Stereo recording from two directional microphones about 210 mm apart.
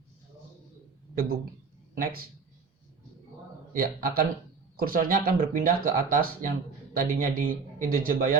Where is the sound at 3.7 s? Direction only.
45° right (ahead or behind).